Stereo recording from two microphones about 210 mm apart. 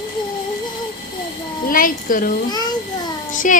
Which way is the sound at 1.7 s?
40° left (ahead or behind).